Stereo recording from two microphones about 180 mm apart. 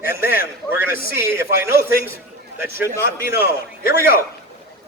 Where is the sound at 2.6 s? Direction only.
15° right (ahead or behind).